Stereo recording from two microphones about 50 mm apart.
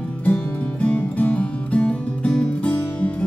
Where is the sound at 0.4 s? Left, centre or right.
Left.